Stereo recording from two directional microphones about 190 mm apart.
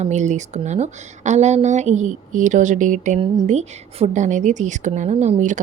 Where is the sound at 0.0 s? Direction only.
40° right (ahead or behind).